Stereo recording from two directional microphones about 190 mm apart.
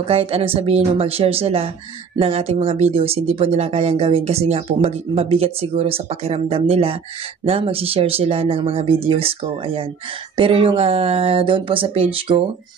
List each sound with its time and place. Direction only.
0.0 s speech: 30° right (ahead or behind)